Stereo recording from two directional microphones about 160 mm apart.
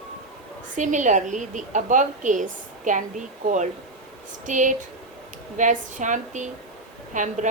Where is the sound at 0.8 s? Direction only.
50° right (ahead or behind).